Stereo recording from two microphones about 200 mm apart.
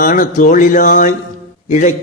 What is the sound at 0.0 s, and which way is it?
A man's voice, 45° left (ahead or behind).